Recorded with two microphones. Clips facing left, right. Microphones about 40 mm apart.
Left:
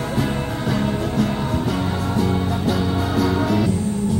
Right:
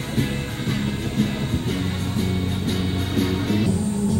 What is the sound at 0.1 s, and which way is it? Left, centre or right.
Music, left.